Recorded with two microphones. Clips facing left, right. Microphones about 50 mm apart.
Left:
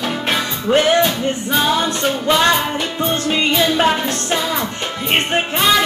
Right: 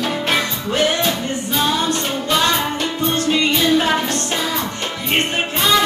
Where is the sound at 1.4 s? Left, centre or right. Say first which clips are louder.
Left 1 dB; centre.